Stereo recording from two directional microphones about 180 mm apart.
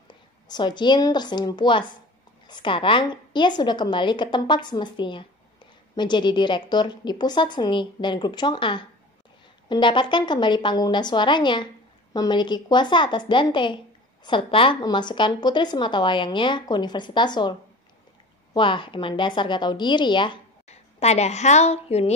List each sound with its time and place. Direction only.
0.1 s a woman's voice: 25° left (ahead or behind)
20.6 s a woman's voice: 35° left (ahead or behind)